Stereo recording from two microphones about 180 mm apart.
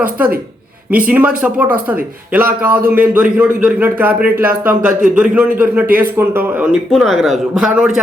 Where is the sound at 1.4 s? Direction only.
10° right (ahead or behind).